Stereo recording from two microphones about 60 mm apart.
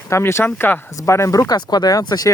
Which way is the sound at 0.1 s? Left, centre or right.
Left.